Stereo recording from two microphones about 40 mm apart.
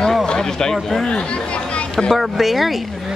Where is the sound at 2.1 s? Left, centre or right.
Centre.